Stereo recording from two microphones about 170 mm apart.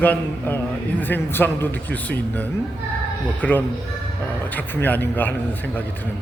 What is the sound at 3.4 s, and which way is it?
Speech, 10° left (ahead or behind).